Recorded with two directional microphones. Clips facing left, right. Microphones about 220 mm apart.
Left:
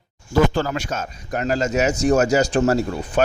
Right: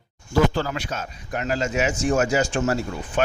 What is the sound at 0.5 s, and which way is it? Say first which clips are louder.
Speech: left 3 dB; 45° left (ahead or behind).